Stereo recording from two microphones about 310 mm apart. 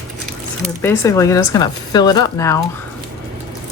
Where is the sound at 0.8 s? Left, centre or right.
Centre.